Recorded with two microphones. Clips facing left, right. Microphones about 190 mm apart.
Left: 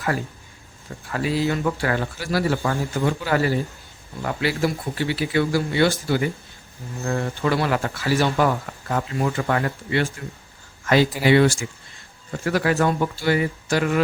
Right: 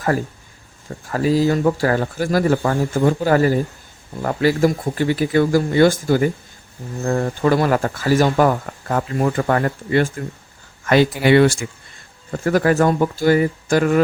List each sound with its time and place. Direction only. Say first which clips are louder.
1.0 s speech: right 6 dB; 40° right (ahead or behind)
7.0 s speech: right 5 dB; 35° right (ahead or behind)
10.8 s speech: right 3 dB; 55° right (ahead or behind)
12.5 s speech: right 5 dB; 45° right (ahead or behind)